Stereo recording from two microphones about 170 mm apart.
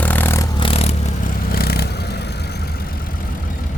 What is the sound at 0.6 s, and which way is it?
Vehicle, 35° left (ahead or behind).